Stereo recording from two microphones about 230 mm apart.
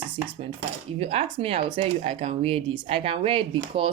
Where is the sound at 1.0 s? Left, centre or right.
Right.